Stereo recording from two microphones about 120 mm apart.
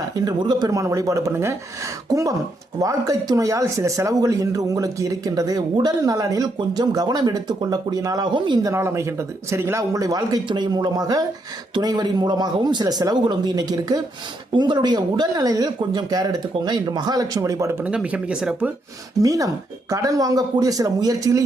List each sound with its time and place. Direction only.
0.1 s speech: 35° right (ahead or behind)
8.6 s speech: 25° right (ahead or behind)
17.9 s speech: 10° right (ahead or behind)
19.2 s speech: 30° right (ahead or behind)